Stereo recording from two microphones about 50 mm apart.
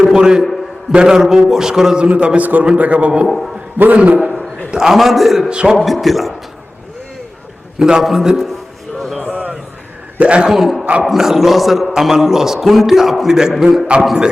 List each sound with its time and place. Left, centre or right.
0.0 s a man's voice: centre
2.0 s a man's voice: right
3.2 s a man's voice: centre
3.9 s a man's voice: right
4.7 s a man's voice: centre
5.5 s a man's voice: centre
5.8 s a man's voice: centre
7.8 s a man's voice: centre
9.3 s a sound: right
10.2 s a man's voice: right
10.5 s a man's voice: centre